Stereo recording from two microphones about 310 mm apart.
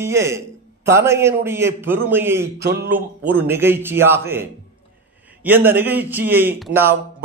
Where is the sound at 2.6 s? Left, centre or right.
Right.